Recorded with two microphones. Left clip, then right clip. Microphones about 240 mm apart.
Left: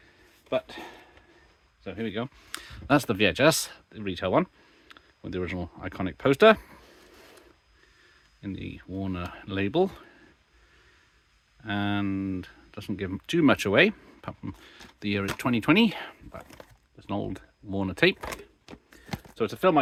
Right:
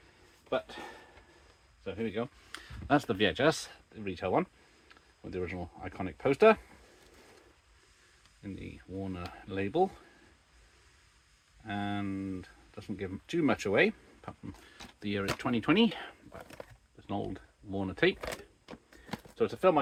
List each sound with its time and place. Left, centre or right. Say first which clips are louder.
1.8 s speech: left 3 dB; left
8.4 s speech: left 7 dB; left
11.6 s speech: left 7 dB; left
19.4 s speech: left 4 dB; left